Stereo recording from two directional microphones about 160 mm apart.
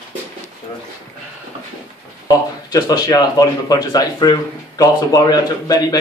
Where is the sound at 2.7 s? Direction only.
25° left (ahead or behind).